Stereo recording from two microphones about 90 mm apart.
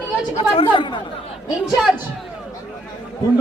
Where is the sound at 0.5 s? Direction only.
65° left (ahead or behind).